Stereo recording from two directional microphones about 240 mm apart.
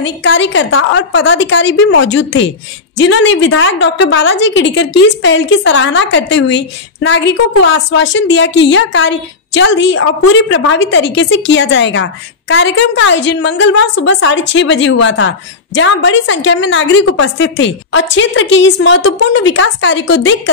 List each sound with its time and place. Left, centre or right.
0.0 s a woman's voice: left